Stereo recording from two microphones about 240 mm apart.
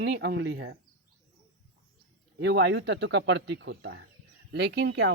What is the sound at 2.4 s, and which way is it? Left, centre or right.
Speech, right.